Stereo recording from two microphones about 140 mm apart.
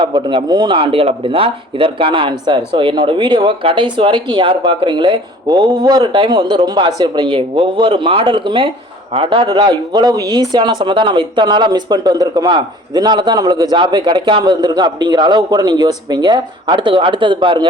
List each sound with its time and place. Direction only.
0.0 s speech: 35° right (ahead or behind)